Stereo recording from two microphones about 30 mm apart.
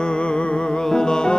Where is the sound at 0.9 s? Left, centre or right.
Left.